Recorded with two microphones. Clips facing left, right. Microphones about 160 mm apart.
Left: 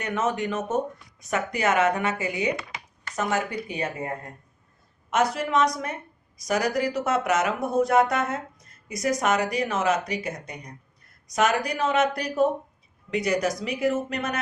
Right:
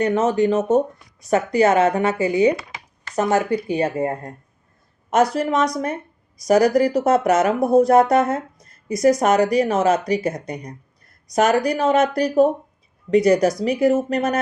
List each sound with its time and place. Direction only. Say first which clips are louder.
0.0 s speech: right 9 dB; 35° right (ahead or behind)